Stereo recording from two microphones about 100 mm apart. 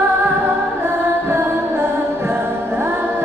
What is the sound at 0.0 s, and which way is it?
Music, 25° right (ahead or behind).